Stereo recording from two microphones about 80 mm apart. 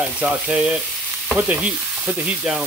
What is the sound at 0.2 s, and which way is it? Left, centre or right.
Frying, centre.